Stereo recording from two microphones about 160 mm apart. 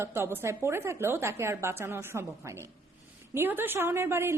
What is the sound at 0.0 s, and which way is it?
A woman's voice, 15° right (ahead or behind).